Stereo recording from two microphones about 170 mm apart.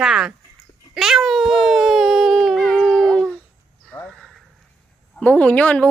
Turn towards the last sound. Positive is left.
turn(degrees=5)  # may be behind; listen again after turning